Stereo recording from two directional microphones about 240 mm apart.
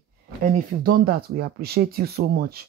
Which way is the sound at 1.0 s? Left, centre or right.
Right.